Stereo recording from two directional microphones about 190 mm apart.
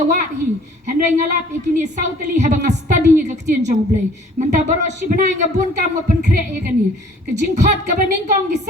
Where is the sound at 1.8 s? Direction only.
40° right (ahead or behind).